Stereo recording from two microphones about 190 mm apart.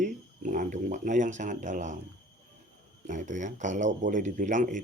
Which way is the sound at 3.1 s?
40° right (ahead or behind).